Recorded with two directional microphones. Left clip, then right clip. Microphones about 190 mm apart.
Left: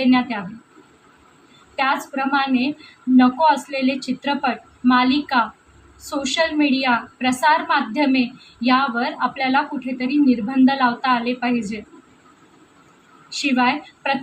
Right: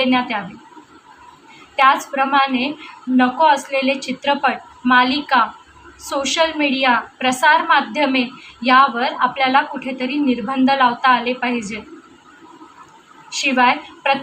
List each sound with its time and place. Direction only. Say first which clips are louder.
0.0 s a woman's voice: right 2 dB; 15° left (ahead or behind)
1.7 s a woman's voice: right 7 dB; 15° left (ahead or behind)
13.3 s a woman's voice: right 4 dB; 20° left (ahead or behind)